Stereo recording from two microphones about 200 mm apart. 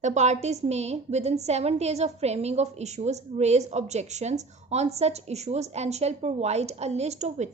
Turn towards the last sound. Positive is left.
turn(degrees=-35)  # may be behind; listen again after turning